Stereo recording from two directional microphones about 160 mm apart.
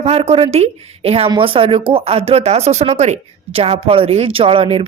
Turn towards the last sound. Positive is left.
turn(degrees=-35)  # may be behind; listen again after turning